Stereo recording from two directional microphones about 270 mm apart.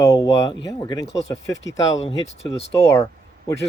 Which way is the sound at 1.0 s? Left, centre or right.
Left.